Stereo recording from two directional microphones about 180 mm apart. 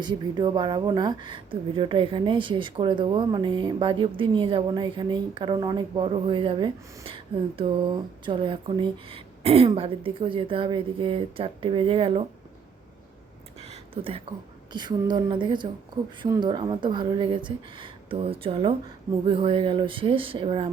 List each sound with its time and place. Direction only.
0.0 s a woman's voice: 25° right (ahead or behind)
13.6 s a sound: 35° right (ahead or behind)
14.7 s a woman's voice: 25° right (ahead or behind)